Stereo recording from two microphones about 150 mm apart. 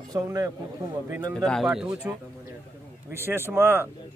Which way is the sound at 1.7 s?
5° right (ahead or behind).